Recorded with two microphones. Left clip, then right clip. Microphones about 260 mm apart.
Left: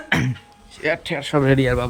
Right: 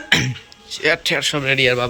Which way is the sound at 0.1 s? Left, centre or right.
Centre.